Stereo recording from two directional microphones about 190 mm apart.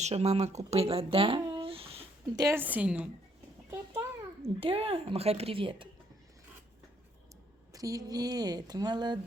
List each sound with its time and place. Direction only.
0.0 s speech: 35° right (ahead or behind)
2.4 s a woman's voice: 15° right (ahead or behind)
4.6 s speech: 30° right (ahead or behind)
7.7 s speech: 20° right (ahead or behind)